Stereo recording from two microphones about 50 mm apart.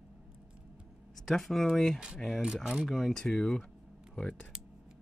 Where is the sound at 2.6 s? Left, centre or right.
Centre.